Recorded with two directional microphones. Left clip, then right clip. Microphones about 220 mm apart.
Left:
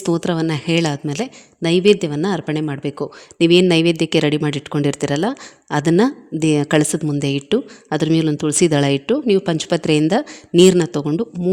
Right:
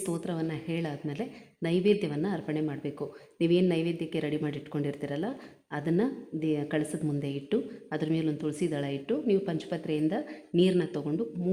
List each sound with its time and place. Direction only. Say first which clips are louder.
0.0 s a woman's voice: left 14 dB; 45° left (ahead or behind)